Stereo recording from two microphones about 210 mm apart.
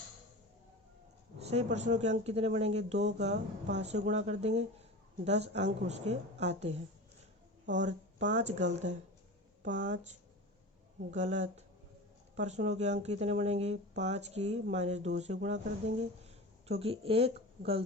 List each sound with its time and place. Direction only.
1.4 s speech: 30° right (ahead or behind)